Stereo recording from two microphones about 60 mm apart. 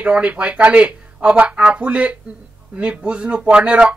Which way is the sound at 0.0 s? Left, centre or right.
Right.